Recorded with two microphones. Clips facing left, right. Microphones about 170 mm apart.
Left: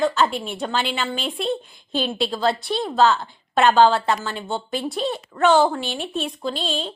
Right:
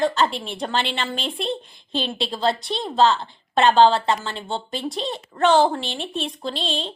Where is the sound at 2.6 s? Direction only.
25° right (ahead or behind).